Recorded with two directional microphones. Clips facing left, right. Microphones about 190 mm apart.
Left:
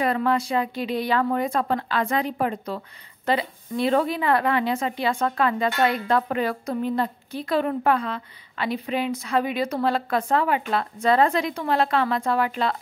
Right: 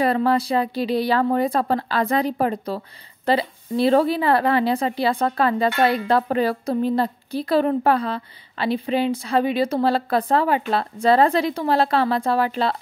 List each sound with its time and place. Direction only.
0.0 s a woman's voice: 35° right (ahead or behind)